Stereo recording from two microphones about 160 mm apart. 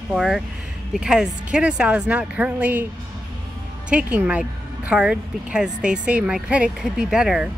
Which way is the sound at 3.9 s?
10° right (ahead or behind).